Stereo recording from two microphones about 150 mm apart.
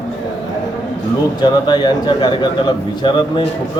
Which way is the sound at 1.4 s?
30° left (ahead or behind).